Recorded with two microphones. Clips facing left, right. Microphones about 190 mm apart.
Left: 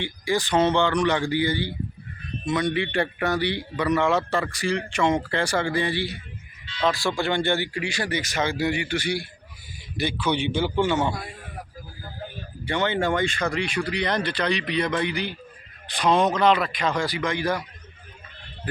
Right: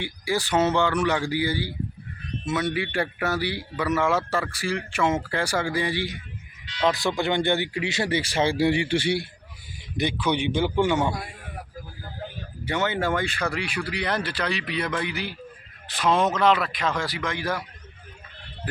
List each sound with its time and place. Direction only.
0.0 s a man's voice: 10° right (ahead or behind); by 9.2 s 25° right (ahead or behind)
10.0 s speech: 15° right (ahead or behind)
12.6 s a man's voice: 5° right (ahead or behind)